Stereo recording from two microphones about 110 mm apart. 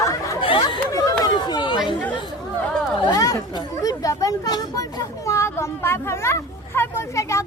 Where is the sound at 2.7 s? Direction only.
5° left (ahead or behind).